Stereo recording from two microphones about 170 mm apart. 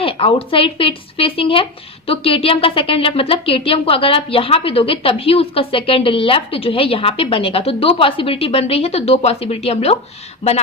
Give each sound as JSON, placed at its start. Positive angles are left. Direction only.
{"t": 0.0, "sound": "a woman's voice", "side_deg": 35}